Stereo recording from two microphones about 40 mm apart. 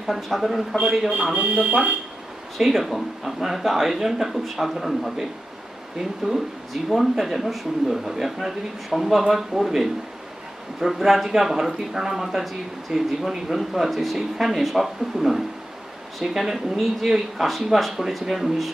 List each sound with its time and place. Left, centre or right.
0.0 s speech: centre
1.1 s speech: right
2.5 s speech: centre
6.2 s speech: centre